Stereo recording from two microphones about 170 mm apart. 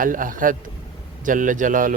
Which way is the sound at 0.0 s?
55° right (ahead or behind).